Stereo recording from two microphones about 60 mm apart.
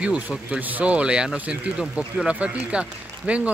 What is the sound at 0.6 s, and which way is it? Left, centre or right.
Speech, right.